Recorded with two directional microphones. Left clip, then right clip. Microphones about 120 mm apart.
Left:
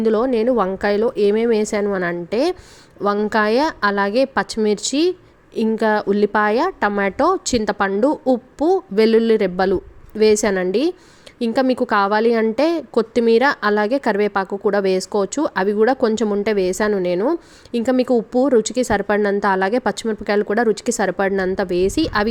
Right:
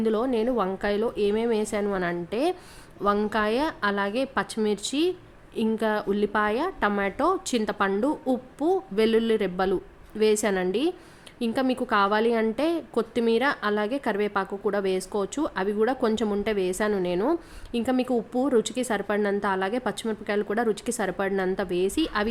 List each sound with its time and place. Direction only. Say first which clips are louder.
0.0 s a woman's voice: left 8 dB; 45° left (ahead or behind)
7.9 s a woman's voice: left 8 dB; 40° left (ahead or behind)